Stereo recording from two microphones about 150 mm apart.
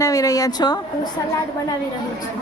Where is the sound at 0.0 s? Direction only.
25° left (ahead or behind).